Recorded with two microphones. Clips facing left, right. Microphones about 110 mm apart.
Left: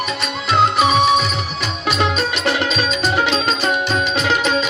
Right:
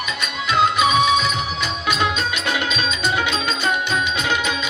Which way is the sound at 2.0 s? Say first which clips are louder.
Left 3 dB; 45° left (ahead or behind).